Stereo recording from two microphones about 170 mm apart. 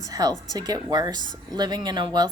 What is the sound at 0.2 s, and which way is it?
Speech, 25° right (ahead or behind).